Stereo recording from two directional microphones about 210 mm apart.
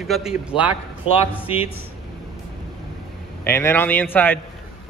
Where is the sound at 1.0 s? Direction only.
30° left (ahead or behind).